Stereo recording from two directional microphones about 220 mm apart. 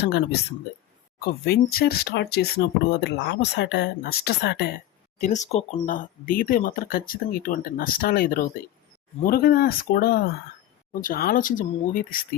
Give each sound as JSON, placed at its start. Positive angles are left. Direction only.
{"t": 0.0, "sound": "speech", "side_deg": 50}
{"t": 5.2, "sound": "speech", "side_deg": 30}